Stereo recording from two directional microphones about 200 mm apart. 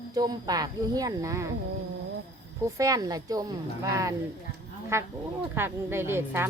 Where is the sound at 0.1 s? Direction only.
20° right (ahead or behind).